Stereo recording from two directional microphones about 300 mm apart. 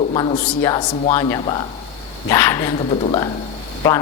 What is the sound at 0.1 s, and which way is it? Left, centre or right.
A woman's voice, centre.